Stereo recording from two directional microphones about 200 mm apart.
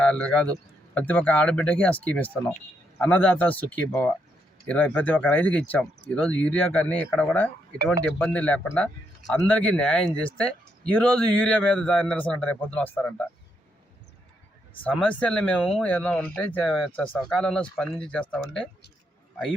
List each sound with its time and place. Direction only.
0.0 s a man's voice: 5° left (ahead or behind)
14.8 s speech: 5° left (ahead or behind)